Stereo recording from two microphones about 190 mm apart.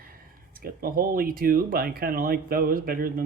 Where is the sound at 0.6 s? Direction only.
50° right (ahead or behind).